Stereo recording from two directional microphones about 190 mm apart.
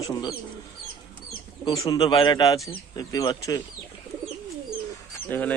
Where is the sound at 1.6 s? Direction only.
20° left (ahead or behind).